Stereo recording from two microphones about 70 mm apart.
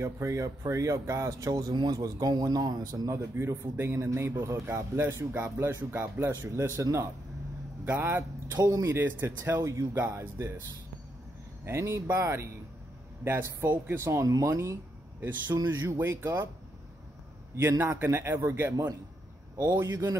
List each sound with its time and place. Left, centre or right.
0.0 s speech: right
3.1 s a man's voice: right
9.6 s a man's voice: right
11.6 s a man's voice: right
15.1 s a man's voice: right
17.6 s a man's voice: right
19.5 s speech: right